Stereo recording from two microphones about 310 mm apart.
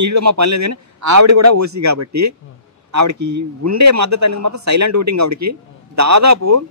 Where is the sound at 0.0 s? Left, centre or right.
Right.